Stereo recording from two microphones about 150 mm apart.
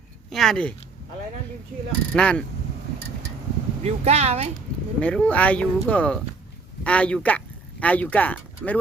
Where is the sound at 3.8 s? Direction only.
45° right (ahead or behind).